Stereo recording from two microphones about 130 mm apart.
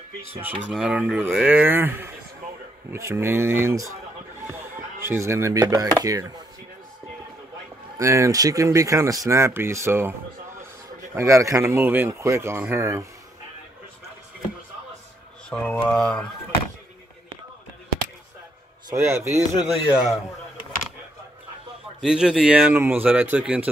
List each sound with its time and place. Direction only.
0.7 s speech: 5° right (ahead or behind)
5.0 s speech: 20° right (ahead or behind)
8.0 s speech: 25° right (ahead or behind)
11.1 s speech: 25° right (ahead or behind)
15.5 s speech: 10° left (ahead or behind)
18.9 s speech: 20° right (ahead or behind)
19.6 s speech: 5° right (ahead or behind)
22.0 s speech: 5° right (ahead or behind)